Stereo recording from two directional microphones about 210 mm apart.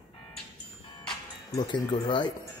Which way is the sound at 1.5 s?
20° left (ahead or behind).